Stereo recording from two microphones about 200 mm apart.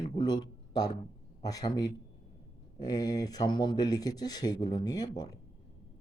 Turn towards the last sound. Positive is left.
turn(degrees=20)  # may be behind; listen again after turning